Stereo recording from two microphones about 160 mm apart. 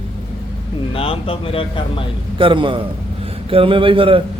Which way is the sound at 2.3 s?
30° right (ahead or behind).